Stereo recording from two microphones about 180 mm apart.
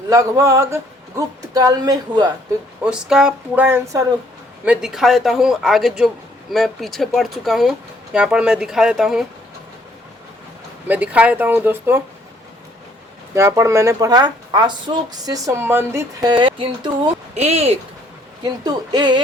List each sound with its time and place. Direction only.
0.1 s a woman's voice: 15° right (ahead or behind)
2.8 s speech: 5° right (ahead or behind)
10.8 s speech: 10° right (ahead or behind)
13.3 s a woman's voice: 15° right (ahead or behind)
17.3 s speech: 35° right (ahead or behind)
18.4 s a woman's voice: 20° right (ahead or behind)